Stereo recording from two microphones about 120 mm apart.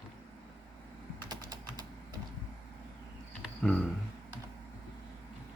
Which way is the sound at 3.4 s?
5° left (ahead or behind).